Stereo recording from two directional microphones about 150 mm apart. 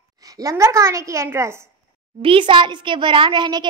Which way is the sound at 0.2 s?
25° right (ahead or behind).